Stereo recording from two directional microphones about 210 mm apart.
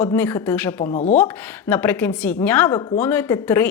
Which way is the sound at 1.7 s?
10° left (ahead or behind).